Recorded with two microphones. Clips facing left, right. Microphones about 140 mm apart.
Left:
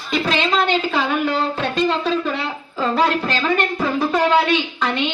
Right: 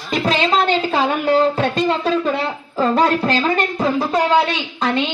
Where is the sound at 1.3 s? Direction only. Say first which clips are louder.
Right 6 dB; 40° right (ahead or behind).